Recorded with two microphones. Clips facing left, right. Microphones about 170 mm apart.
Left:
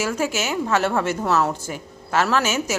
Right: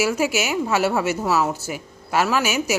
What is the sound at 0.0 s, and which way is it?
A woman's voice, 10° right (ahead or behind).